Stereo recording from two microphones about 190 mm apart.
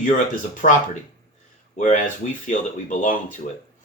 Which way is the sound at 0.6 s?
40° left (ahead or behind).